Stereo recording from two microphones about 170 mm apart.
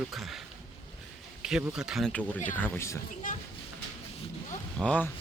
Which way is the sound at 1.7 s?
5° right (ahead or behind).